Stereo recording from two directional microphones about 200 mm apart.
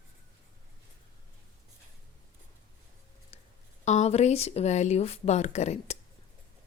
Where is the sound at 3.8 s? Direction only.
35° left (ahead or behind).